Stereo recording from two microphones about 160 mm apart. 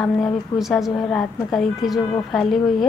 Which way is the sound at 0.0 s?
Centre (ahead or behind).